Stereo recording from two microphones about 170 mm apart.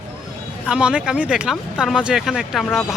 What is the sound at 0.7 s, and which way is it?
Speech, 5° right (ahead or behind).